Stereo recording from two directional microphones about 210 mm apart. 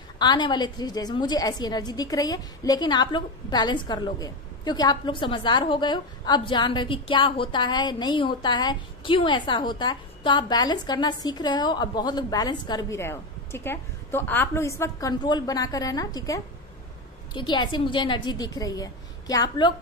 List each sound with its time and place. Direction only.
0.2 s a woman's voice: 20° left (ahead or behind)